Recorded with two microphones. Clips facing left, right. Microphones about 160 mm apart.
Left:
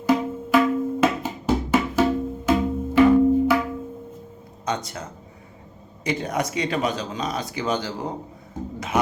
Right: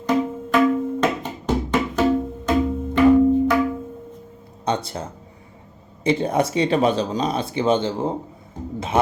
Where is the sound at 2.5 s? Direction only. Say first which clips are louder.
Right 1 dB; 5° left (ahead or behind).